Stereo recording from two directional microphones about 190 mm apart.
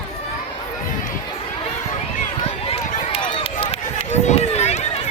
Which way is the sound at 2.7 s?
30° left (ahead or behind).